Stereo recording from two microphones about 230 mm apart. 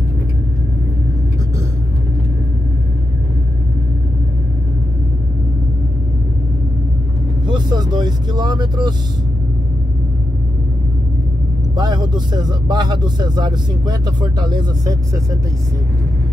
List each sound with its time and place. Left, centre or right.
7.4 s vehicle: centre
11.7 s speech: centre